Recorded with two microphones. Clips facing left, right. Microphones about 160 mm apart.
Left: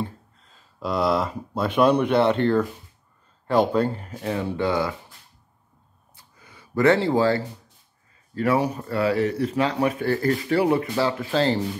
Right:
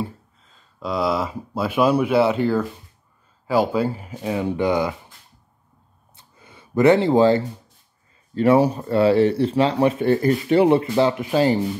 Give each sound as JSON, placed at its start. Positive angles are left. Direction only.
{"t": 0.0, "sound": "speech", "side_deg": 0}
{"t": 6.1, "sound": "a sound", "side_deg": -25}
{"t": 8.4, "sound": "speech", "side_deg": -25}